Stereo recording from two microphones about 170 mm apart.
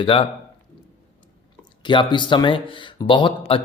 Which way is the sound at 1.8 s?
25° left (ahead or behind).